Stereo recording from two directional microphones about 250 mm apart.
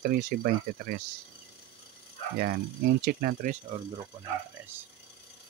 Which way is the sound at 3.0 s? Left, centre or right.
Right.